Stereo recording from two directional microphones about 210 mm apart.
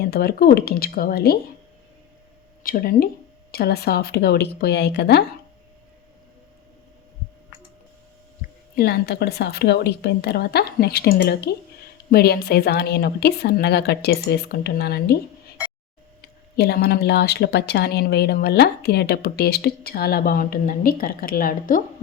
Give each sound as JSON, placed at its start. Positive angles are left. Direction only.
{"t": 0.0, "sound": "a woman's voice", "side_deg": 50}
{"t": 2.6, "sound": "a woman's voice", "side_deg": 45}
{"t": 8.7, "sound": "a woman's voice", "side_deg": 45}
{"t": 16.6, "sound": "a woman's voice", "side_deg": 50}